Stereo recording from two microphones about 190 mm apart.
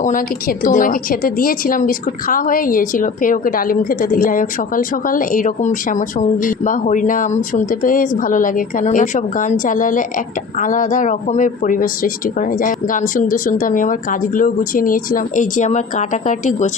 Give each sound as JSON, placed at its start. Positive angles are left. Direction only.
{"t": 0.0, "sound": "a woman's voice", "side_deg": 45}